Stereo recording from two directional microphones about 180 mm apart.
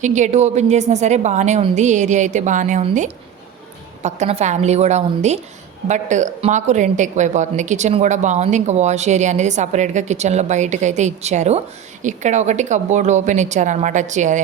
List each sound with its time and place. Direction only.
0.0 s a woman's voice: 40° right (ahead or behind)
4.0 s a woman's voice: 40° right (ahead or behind)